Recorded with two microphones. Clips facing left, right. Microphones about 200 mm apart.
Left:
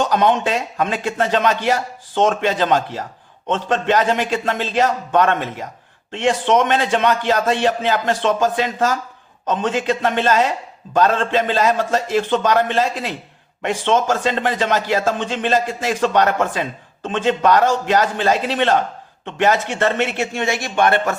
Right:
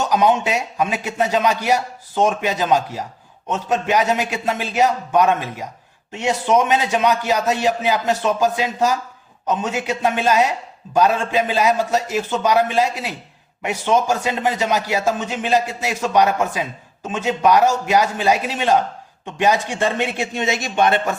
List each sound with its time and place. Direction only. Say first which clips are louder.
0.0 s a man's voice: left 1 dB; 10° right (ahead or behind)